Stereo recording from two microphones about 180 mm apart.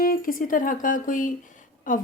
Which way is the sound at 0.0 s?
55° left (ahead or behind).